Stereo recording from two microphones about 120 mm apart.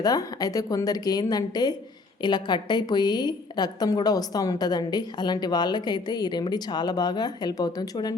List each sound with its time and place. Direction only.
0.0 s a woman's voice: 30° left (ahead or behind)